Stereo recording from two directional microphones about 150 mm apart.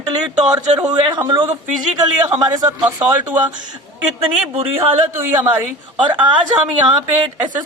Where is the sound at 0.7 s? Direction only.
25° right (ahead or behind).